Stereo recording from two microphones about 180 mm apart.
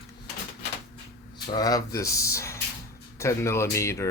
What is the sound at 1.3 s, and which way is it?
Speech, 20° left (ahead or behind).